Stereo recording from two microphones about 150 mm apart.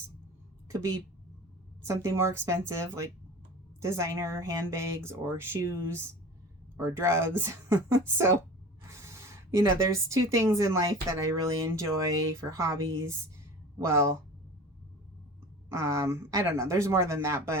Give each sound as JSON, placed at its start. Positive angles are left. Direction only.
{"t": 0.7, "sound": "speech", "side_deg": -20}
{"t": 8.9, "sound": "speech", "side_deg": -20}
{"t": 15.7, "sound": "speech", "side_deg": -20}